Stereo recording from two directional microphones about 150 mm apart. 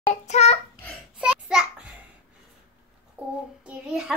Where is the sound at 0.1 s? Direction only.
45° left (ahead or behind).